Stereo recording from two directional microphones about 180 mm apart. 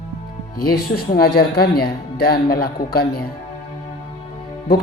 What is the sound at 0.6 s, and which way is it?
Speech, 55° left (ahead or behind).